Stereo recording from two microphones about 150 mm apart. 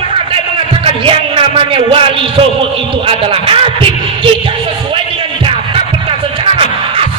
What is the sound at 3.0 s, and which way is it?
Speech, 40° right (ahead or behind).